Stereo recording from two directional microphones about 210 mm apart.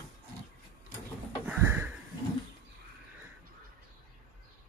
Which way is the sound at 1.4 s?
10° right (ahead or behind).